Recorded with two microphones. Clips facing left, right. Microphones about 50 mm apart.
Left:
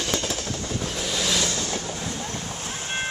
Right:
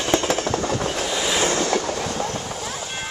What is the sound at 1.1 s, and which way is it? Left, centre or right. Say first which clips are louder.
Vehicle: right 2 dB; centre.